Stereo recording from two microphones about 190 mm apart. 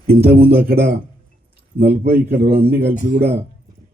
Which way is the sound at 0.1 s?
55° right (ahead or behind).